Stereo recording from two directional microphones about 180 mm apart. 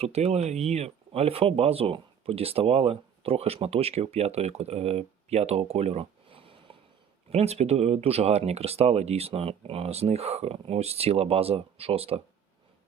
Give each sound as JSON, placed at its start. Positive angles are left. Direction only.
{"t": 0.0, "sound": "speech", "side_deg": -35}